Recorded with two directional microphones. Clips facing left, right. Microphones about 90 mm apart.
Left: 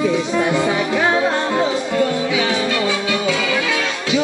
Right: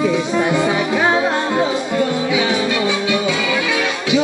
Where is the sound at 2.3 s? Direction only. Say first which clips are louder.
Right 1 dB; 20° right (ahead or behind).